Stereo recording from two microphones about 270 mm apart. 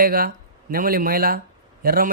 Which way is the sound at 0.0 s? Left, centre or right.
Right.